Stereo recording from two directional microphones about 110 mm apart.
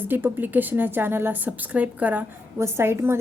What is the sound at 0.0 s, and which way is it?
A woman's voice, 20° right (ahead or behind).